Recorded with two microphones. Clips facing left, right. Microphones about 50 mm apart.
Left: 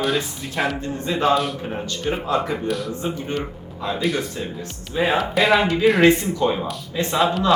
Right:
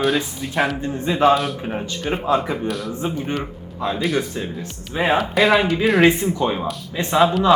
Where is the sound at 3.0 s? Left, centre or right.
Right.